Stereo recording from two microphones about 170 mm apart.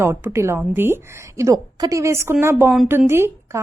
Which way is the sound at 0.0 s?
15° right (ahead or behind).